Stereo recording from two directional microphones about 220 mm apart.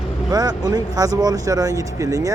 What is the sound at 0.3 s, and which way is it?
Speech, 20° right (ahead or behind).